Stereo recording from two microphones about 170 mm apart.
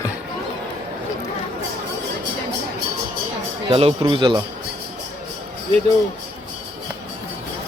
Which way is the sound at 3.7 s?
35° right (ahead or behind).